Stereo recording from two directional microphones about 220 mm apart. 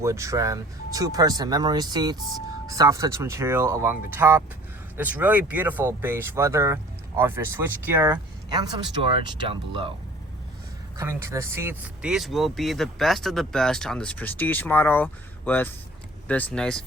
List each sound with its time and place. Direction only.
0.0 s speech: 15° right (ahead or behind)
10.9 s speech: 10° right (ahead or behind); by 16.8 s 5° left (ahead or behind)